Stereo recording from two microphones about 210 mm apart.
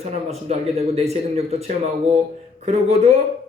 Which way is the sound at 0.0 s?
30° right (ahead or behind).